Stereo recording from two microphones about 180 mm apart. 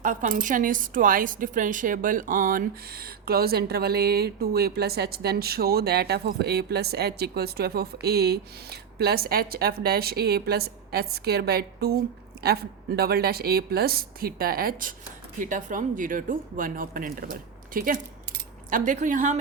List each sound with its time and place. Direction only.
0.0 s a woman's voice: 50° right (ahead or behind)
13.0 s a woman's voice: 60° right (ahead or behind); by 19.4 s 45° right (ahead or behind)